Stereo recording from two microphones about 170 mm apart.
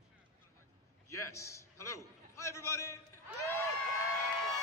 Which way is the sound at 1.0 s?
15° left (ahead or behind).